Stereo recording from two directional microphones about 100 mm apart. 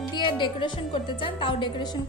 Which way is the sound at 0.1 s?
50° left (ahead or behind).